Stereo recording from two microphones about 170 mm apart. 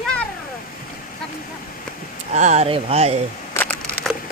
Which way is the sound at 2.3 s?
45° right (ahead or behind).